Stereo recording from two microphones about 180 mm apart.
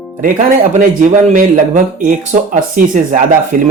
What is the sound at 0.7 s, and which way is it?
Speech, 40° right (ahead or behind).